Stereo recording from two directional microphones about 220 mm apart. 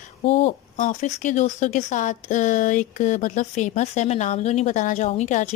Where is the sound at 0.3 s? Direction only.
30° left (ahead or behind).